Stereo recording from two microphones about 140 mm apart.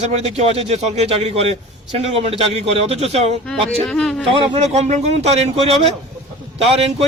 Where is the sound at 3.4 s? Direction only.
5° left (ahead or behind).